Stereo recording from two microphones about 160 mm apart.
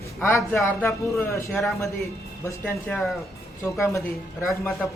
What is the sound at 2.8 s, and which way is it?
Speech, centre (ahead or behind).